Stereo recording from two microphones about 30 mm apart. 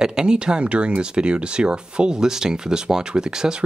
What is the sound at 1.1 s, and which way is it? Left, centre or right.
Speech, right.